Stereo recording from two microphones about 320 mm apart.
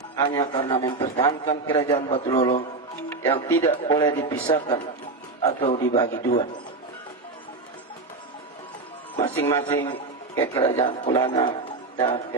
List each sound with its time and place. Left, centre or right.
0.2 s a man's voice: centre
9.3 s a man's voice: centre